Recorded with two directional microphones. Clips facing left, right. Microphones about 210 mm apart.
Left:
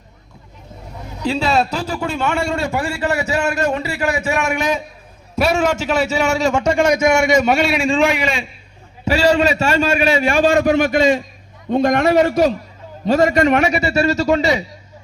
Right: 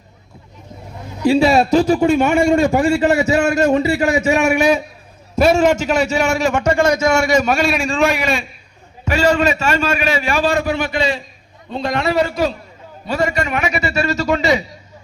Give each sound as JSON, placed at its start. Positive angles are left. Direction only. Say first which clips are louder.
{"t": 1.2, "sound": "a man's voice", "louder": "right 5 dB", "side_deg": -10}
{"t": 5.4, "sound": "a man's voice", "louder": "right 4 dB", "side_deg": 0}
{"t": 6.6, "sound": "a man's voice", "louder": "even", "side_deg": 15}
{"t": 9.4, "sound": "a man's voice", "louder": "left 1 dB", "side_deg": 35}
{"t": 13.8, "sound": "a man's voice", "louder": "left 3 dB", "side_deg": 30}